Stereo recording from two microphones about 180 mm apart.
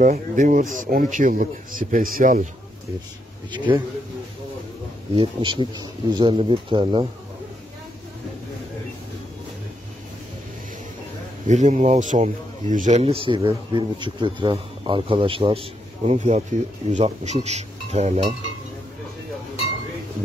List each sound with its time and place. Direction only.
0.0 s speech: 45° right (ahead or behind)
3.5 s speech: 25° right (ahead or behind)
5.1 s speech: 30° right (ahead or behind)
11.4 s speech: 40° right (ahead or behind)